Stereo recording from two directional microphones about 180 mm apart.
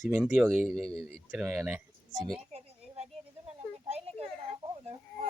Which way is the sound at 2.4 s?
35° right (ahead or behind).